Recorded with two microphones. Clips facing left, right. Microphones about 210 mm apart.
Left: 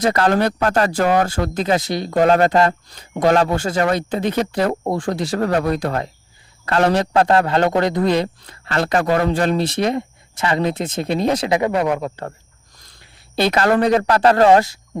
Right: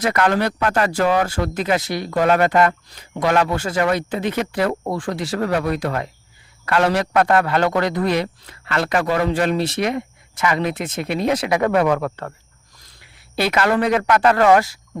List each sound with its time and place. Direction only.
0.0 s speech: 35° left (ahead or behind)
3.8 s speech: 40° left (ahead or behind)
8.6 s speech: 35° left (ahead or behind)
11.6 s speech: 15° left (ahead or behind)
13.5 s speech: 40° left (ahead or behind)